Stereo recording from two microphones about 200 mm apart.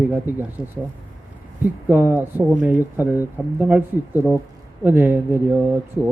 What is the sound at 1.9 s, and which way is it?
A man's voice, 10° right (ahead or behind).